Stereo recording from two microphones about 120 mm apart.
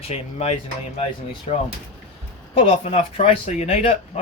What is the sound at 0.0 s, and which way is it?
Speech, 60° left (ahead or behind).